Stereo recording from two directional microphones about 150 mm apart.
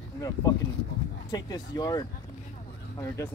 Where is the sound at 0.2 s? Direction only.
25° left (ahead or behind).